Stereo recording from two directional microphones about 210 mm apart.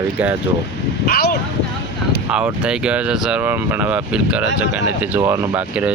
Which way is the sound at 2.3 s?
5° right (ahead or behind).